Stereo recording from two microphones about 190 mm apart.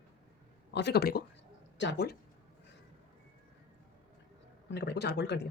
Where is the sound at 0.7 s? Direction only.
65° left (ahead or behind).